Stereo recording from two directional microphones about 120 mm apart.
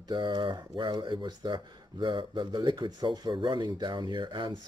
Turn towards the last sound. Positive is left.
turn(degrees=-40)  # may be behind; listen again after turning